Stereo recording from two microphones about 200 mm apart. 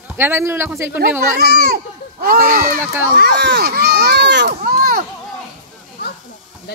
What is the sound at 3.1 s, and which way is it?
A child's voice, 55° right (ahead or behind).